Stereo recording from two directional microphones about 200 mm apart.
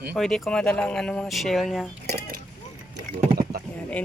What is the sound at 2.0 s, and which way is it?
Speech, 50° right (ahead or behind).